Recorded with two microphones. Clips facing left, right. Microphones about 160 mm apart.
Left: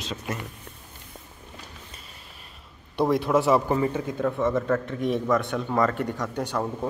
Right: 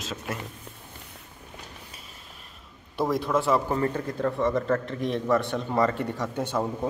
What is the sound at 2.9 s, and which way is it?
Speech, centre (ahead or behind).